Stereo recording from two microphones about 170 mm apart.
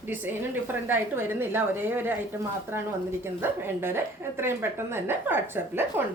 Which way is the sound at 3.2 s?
15° right (ahead or behind).